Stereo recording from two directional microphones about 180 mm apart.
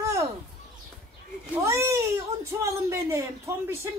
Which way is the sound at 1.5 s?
15° right (ahead or behind).